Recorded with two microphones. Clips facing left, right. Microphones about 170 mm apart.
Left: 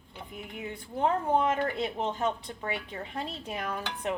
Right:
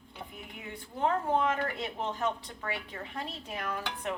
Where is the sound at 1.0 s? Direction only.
20° left (ahead or behind).